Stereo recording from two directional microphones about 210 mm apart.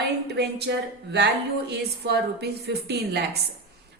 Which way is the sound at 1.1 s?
50° right (ahead or behind).